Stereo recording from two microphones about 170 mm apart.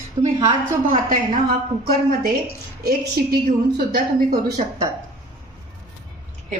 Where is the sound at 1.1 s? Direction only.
60° right (ahead or behind).